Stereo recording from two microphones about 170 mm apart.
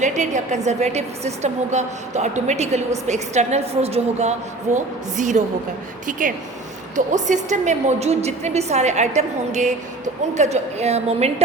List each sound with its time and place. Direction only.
0.0 s a woman's voice: 45° right (ahead or behind)